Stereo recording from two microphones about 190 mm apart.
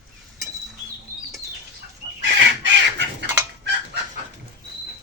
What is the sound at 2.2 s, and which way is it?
Chicken, 70° right (ahead or behind).